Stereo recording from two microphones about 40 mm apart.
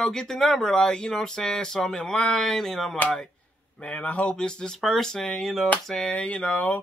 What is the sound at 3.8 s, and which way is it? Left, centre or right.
Speech, left.